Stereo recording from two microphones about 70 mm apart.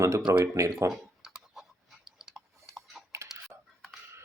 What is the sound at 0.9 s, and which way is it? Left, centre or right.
Speech, right.